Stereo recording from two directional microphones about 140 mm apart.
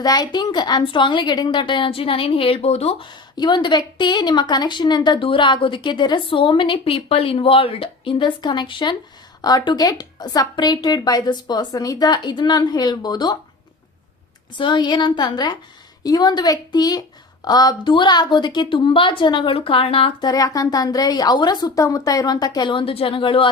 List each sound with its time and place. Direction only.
0.0 s a woman's voice: 30° left (ahead or behind); by 3.1 s 45° left (ahead or behind)
3.1 s a woman's voice: 30° left (ahead or behind)
14.6 s a woman's voice: 35° left (ahead or behind)
20.2 s a woman's voice: 25° left (ahead or behind)